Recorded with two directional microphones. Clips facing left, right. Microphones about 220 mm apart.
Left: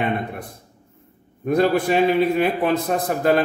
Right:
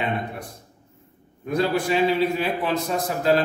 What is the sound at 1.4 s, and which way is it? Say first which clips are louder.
A man's voice: left 5 dB; 55° left (ahead or behind).